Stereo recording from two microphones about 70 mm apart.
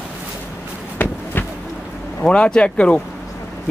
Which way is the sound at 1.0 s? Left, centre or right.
Left.